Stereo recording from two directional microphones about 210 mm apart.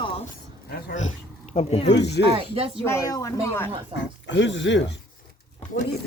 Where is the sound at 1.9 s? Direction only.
55° left (ahead or behind).